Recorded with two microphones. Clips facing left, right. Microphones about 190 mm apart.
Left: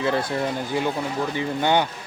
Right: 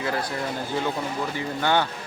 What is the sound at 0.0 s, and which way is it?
Speech, 25° left (ahead or behind).